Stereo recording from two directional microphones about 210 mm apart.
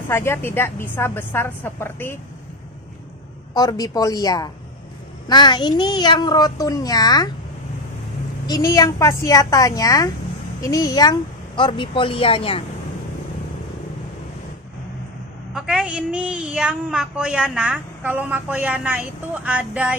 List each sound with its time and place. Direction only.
0.1 s a woman's voice: 10° left (ahead or behind)
3.5 s a woman's voice: 15° left (ahead or behind)
8.5 s a woman's voice: 15° left (ahead or behind)
15.5 s a woman's voice: 5° right (ahead or behind)